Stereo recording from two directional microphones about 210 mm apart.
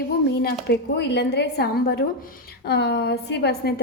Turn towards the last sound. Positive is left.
turn(degrees=50)  # may be behind; listen again after turning